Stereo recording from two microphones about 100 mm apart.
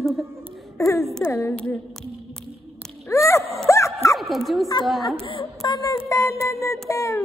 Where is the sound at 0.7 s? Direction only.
30° left (ahead or behind).